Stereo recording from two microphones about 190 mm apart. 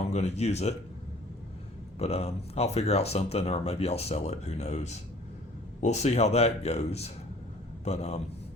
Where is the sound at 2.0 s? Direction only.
35° left (ahead or behind).